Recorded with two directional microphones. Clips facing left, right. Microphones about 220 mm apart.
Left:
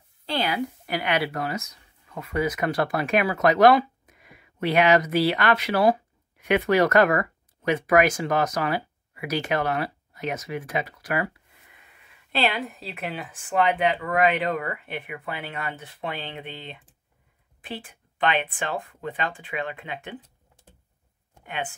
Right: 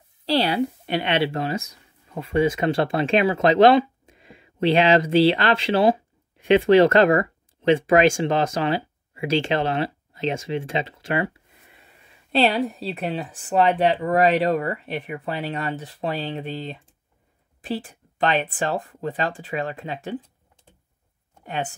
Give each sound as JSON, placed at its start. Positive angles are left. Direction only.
{"t": 0.2, "sound": "speech", "side_deg": -35}
{"t": 17.8, "sound": "speech", "side_deg": -40}